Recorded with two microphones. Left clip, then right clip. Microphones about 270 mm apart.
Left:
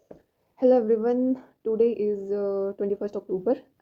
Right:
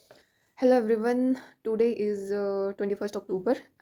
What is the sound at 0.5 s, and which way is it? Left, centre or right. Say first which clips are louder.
Speech: left 3 dB; right.